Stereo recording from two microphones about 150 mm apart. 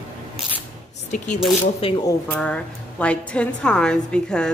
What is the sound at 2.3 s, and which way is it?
A woman's voice, 5° left (ahead or behind).